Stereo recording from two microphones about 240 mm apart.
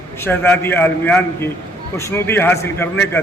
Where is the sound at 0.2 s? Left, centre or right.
Centre.